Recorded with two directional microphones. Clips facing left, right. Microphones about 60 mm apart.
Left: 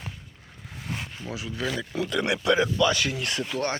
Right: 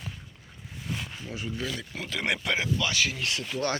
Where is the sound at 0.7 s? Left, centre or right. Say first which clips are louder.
Left 1 dB; left.